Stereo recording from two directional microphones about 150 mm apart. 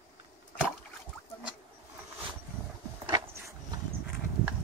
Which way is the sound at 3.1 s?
25° right (ahead or behind).